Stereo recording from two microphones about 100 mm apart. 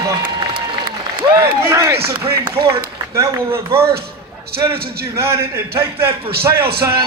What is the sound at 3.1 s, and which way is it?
A man's voice, 30° right (ahead or behind).